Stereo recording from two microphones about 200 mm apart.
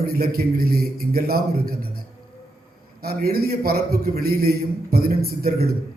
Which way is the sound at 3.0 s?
50° right (ahead or behind).